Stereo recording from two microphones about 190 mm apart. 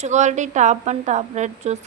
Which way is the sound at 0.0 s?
40° right (ahead or behind).